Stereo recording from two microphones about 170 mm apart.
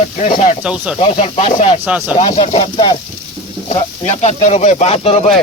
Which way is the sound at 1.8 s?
5° right (ahead or behind).